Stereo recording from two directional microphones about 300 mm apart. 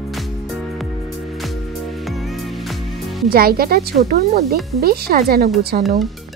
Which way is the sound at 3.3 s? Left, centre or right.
Right.